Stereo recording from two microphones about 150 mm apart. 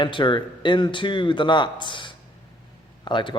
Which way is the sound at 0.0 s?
35° left (ahead or behind).